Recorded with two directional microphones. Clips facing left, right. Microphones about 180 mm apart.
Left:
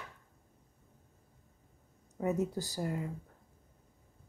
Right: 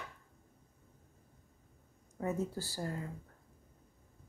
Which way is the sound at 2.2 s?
20° left (ahead or behind).